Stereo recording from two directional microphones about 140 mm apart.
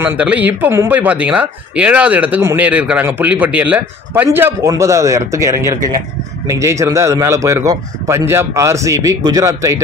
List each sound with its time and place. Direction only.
0.0 s a man's voice: 10° right (ahead or behind)